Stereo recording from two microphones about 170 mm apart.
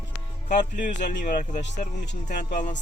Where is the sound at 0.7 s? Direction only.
50° left (ahead or behind).